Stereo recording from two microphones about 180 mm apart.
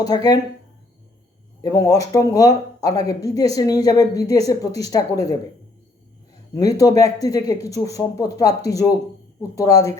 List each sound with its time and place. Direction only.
0.0 s speech: 20° left (ahead or behind)
1.6 s speech: 20° left (ahead or behind)
6.5 s speech: 20° left (ahead or behind)